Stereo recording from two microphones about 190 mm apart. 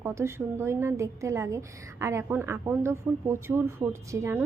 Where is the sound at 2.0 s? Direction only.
10° right (ahead or behind).